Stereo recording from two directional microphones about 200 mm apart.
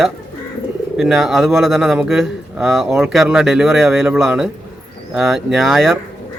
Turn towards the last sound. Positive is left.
turn(degrees=0)  # may be behind; listen again after turning